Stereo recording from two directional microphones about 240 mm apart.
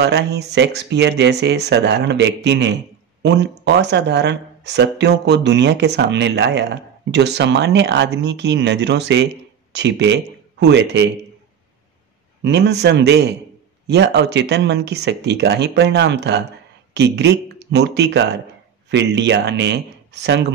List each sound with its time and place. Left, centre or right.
0.0 s speech: right
12.4 s speech: right